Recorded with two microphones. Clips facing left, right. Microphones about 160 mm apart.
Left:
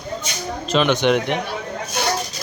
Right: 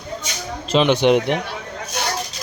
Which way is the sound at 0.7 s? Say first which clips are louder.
Right 2 dB; 30° right (ahead or behind).